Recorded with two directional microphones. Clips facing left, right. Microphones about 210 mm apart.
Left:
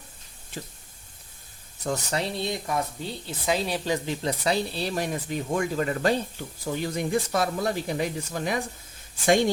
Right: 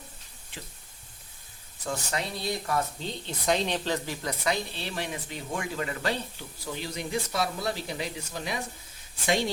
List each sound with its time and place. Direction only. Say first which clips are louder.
1.8 s speech: left 4 dB; 35° left (ahead or behind)